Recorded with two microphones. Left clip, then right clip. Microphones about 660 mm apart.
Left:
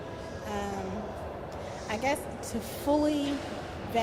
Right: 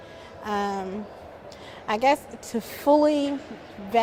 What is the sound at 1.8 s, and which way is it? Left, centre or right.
A woman's voice, right.